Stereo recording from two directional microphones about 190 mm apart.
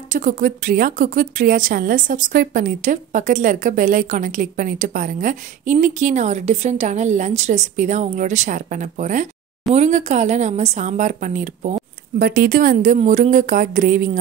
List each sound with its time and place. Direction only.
0.1 s speech: 45° right (ahead or behind)